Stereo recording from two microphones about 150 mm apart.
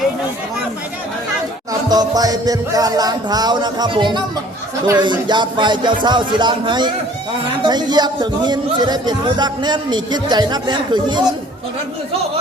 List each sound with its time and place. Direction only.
1.9 s speech: 25° right (ahead or behind)